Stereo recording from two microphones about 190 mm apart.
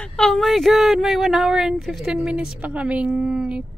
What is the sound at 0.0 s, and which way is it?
Speech, 5° left (ahead or behind).